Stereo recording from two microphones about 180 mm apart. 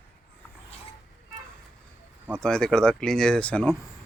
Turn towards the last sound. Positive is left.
turn(degrees=10)  # may be behind; listen again after turning